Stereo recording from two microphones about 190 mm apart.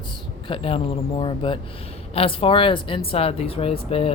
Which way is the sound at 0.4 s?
30° left (ahead or behind).